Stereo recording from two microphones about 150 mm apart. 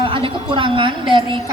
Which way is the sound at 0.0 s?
35° right (ahead or behind).